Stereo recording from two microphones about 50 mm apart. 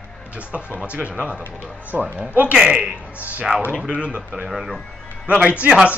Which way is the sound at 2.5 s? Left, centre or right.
Centre.